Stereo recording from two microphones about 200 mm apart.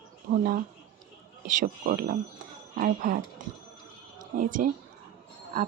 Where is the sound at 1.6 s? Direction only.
45° right (ahead or behind).